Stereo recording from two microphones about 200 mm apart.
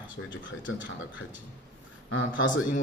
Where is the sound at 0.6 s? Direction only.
70° left (ahead or behind).